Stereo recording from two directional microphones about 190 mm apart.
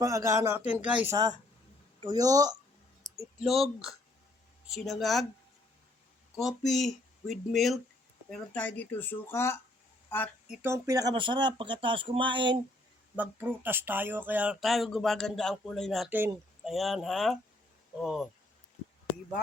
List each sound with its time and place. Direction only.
0.0 s speech: 15° right (ahead or behind)
1.1 s speech: 20° right (ahead or behind)
3.4 s speech: centre (ahead or behind)
6.3 s speech: centre (ahead or behind)
10.5 s speech: 10° right (ahead or behind)
13.1 s speech: 10° right (ahead or behind)
16.1 s speech: 10° right (ahead or behind)
16.7 s speech: centre (ahead or behind)